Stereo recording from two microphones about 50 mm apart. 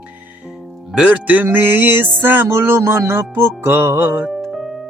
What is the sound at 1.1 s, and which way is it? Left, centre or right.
Music, right.